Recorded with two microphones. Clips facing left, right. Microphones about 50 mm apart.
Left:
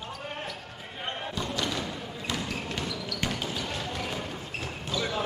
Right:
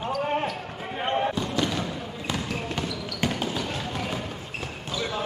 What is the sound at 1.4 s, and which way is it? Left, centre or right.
Basketball bounce, centre.